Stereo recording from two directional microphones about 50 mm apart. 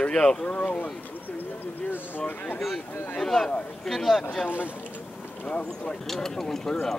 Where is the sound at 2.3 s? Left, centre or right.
Left.